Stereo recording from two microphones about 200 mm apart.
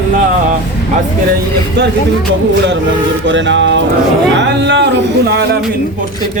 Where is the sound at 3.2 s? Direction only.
65° right (ahead or behind).